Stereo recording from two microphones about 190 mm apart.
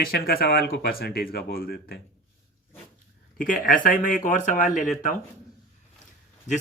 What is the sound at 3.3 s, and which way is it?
Speech, 45° left (ahead or behind).